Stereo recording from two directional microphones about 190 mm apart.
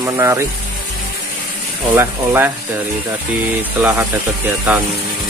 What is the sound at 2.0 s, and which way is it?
Speech, 15° right (ahead or behind).